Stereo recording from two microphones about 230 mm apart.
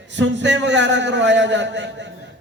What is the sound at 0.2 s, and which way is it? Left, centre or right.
A man's voice, right.